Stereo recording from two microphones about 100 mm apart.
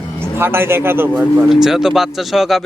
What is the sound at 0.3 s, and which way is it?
A man's voice, 25° right (ahead or behind).